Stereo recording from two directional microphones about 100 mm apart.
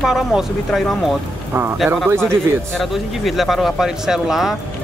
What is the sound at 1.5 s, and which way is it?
Speech, 20° right (ahead or behind).